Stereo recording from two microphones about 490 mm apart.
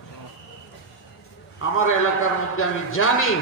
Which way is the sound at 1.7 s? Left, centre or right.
Left.